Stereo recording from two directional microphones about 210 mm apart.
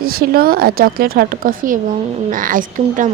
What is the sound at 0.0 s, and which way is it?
A woman's voice, 45° right (ahead or behind).